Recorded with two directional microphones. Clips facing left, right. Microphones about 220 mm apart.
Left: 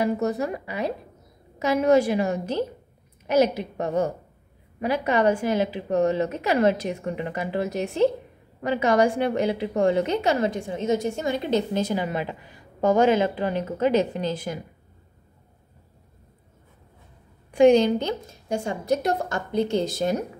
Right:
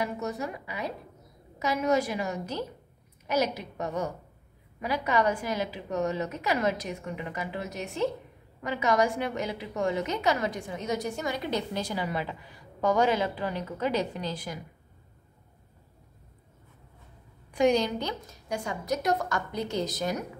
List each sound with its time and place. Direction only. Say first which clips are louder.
0.0 s a woman's voice: left 8 dB; 35° left (ahead or behind)
17.5 s a woman's voice: left 8 dB; 25° left (ahead or behind)